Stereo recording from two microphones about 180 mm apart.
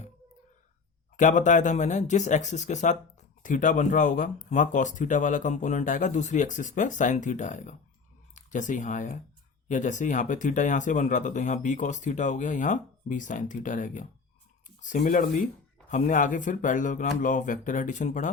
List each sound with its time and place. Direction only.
1.1 s speech: 45° left (ahead or behind)
15.0 s speech: 45° left (ahead or behind)